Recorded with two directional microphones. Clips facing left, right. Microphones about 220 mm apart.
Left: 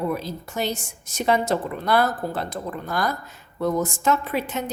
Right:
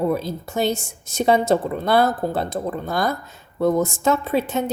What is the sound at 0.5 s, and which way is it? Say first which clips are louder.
A woman's voice: right 5 dB; 25° right (ahead or behind).